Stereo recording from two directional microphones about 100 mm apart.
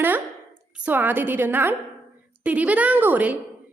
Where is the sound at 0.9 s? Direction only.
20° right (ahead or behind).